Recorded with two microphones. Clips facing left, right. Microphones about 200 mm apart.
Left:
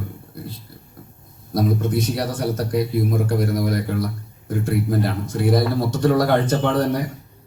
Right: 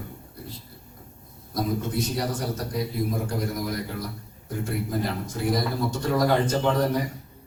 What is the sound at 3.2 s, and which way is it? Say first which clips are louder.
A man's voice: left 7 dB; 60° left (ahead or behind).